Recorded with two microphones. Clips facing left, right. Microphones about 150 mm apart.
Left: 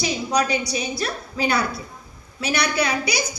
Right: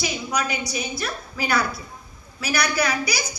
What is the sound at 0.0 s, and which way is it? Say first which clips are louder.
A woman's voice: left 4 dB; 35° left (ahead or behind).